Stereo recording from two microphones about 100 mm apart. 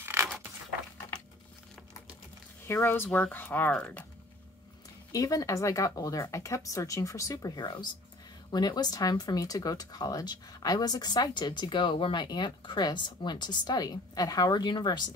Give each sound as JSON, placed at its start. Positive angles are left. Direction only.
{"t": 0.0, "sound": "zipper", "side_deg": -25}
{"t": 2.6, "sound": "speech", "side_deg": 20}
{"t": 5.1, "sound": "speech", "side_deg": 40}